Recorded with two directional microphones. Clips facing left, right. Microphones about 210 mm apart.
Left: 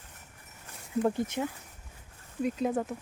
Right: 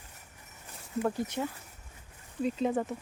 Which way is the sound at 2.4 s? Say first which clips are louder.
Even; 5° left (ahead or behind).